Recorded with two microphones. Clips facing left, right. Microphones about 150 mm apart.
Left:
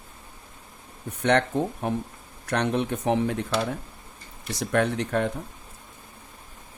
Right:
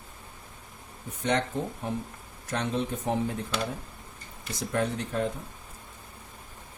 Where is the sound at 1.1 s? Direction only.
65° left (ahead or behind).